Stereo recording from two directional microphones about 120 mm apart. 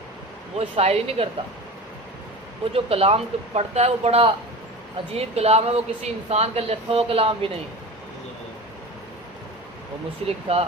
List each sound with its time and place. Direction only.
0.6 s speech: 55° right (ahead or behind)
2.7 s speech: 55° right (ahead or behind)
10.2 s speech: 55° right (ahead or behind)